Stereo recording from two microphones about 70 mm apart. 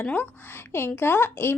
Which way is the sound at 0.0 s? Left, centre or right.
Centre.